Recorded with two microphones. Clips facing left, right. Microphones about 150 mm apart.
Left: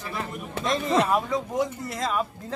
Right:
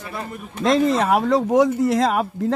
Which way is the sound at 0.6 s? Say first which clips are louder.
Right 6 dB; 85° right.